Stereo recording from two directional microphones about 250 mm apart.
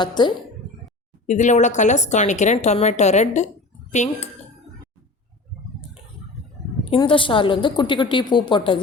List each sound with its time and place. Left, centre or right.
0.0 s speech: centre
1.3 s a woman's voice: left
6.9 s a woman's voice: centre